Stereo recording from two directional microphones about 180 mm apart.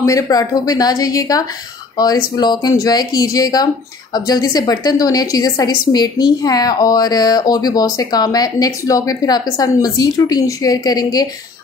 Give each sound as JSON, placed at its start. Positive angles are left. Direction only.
{"t": 0.0, "sound": "speech", "side_deg": 20}